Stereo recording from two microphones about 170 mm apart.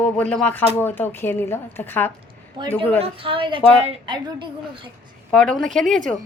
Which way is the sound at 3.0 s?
30° right (ahead or behind).